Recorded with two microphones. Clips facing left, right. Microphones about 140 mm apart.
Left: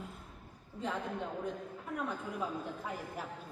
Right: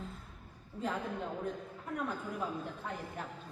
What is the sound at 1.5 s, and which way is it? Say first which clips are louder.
A woman's voice: even; centre (ahead or behind).